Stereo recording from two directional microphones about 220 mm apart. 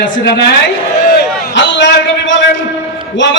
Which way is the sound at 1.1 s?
55° left (ahead or behind).